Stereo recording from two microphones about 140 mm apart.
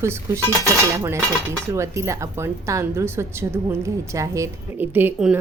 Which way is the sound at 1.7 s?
20° right (ahead or behind).